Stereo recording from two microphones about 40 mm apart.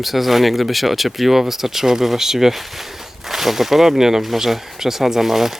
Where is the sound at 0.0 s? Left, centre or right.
Centre.